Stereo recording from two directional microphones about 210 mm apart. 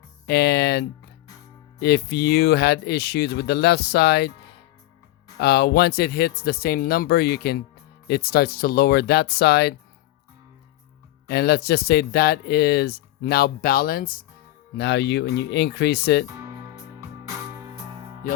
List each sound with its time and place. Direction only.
0.3 s speech: 50° left (ahead or behind)
5.4 s speech: 50° left (ahead or behind)
11.3 s speech: 50° left (ahead or behind)
14.8 s speech: 55° left (ahead or behind)
18.2 s music: 40° left (ahead or behind)